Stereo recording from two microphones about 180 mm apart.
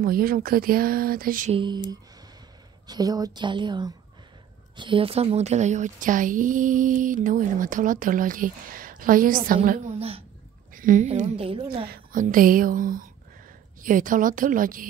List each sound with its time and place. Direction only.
0.0 s a woman's voice: 55° right (ahead or behind)
1.5 s a woman's voice: 25° right (ahead or behind)
10.7 s a woman's voice: 45° right (ahead or behind); by 11.8 s 30° right (ahead or behind)
11.9 s a woman's voice: 50° right (ahead or behind)